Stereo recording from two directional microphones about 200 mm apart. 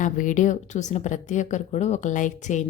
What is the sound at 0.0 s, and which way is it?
A woman's voice, 40° left (ahead or behind).